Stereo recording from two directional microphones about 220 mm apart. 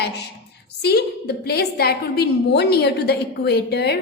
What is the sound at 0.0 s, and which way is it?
A woman's voice, 50° left (ahead or behind).